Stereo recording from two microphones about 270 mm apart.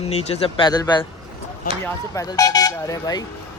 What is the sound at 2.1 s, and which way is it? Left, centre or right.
Speech, centre.